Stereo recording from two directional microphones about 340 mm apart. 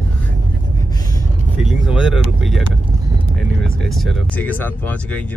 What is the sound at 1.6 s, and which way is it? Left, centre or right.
Speech, centre.